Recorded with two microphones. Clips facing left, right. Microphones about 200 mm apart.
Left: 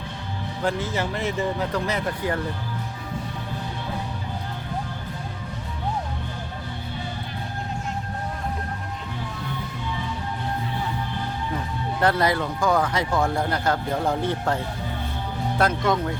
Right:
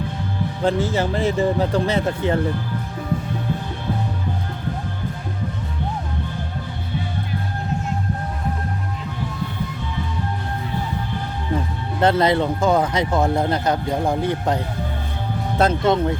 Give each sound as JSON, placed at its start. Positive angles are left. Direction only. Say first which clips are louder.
{"t": 0.6, "sound": "speech", "louder": "right 5 dB", "side_deg": -30}
{"t": 11.9, "sound": "speech", "louder": "right 5 dB", "side_deg": -25}